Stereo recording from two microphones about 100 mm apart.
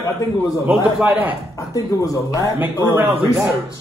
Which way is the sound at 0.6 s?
20° right (ahead or behind).